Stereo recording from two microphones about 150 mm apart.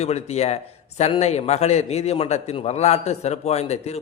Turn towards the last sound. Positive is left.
turn(degrees=45)  # may be behind; listen again after turning